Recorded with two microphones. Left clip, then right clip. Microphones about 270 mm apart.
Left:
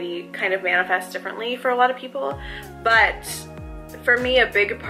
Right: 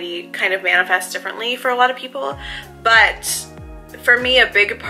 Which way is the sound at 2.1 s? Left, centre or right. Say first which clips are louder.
Right 2 dB; left.